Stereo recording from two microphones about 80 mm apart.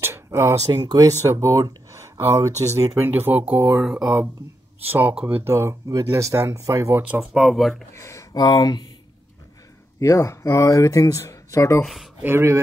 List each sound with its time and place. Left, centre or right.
0.0 s a sound: right
0.7 s speech: right
3.1 s speech: right
3.8 s speech: centre
4.8 s speech: right
5.9 s speech: right
6.9 s speech: centre
7.4 s speech: centre
7.9 s speech: left
9.9 s speech: left
11.8 s speech: centre
12.2 s speech: right